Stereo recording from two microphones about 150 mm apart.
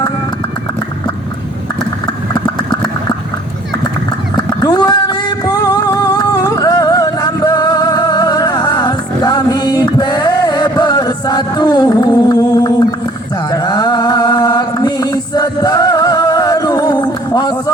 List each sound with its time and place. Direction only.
4.4 s a sound: 30° left (ahead or behind)
9.8 s music: 30° left (ahead or behind)
13.5 s mantra: 30° left (ahead or behind)